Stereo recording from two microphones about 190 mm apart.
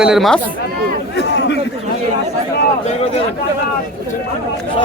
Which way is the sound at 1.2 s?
65° left (ahead or behind).